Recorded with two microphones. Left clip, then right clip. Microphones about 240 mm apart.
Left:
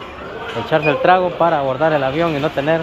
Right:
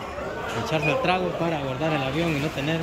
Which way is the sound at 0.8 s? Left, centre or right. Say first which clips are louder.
Left 10 dB; centre.